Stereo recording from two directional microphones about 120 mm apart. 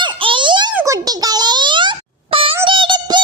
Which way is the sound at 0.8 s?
30° right (ahead or behind).